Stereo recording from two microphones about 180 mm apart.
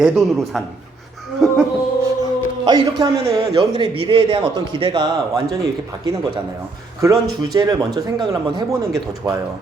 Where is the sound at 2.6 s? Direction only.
25° right (ahead or behind).